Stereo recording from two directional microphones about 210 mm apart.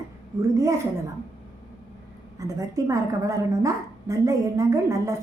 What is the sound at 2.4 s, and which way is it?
A woman's voice, 15° right (ahead or behind).